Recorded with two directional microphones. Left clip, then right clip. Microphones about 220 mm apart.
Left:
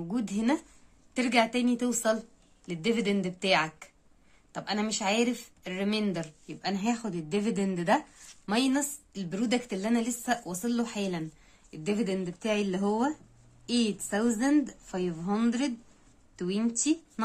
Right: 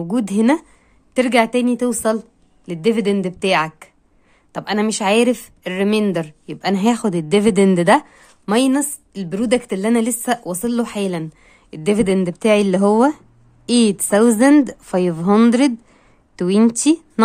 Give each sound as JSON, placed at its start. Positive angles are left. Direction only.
{"t": 0.1, "sound": "a woman's voice", "side_deg": -45}